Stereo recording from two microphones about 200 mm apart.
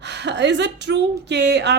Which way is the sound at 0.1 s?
60° right (ahead or behind).